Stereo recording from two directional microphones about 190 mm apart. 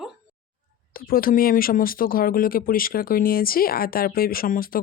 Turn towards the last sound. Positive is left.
turn(degrees=50)  # may be behind; listen again after turning